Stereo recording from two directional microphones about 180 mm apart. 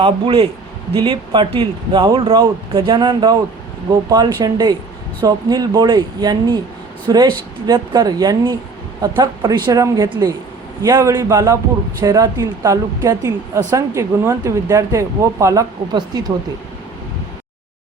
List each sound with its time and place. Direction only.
0.0 s a man's voice: 30° right (ahead or behind)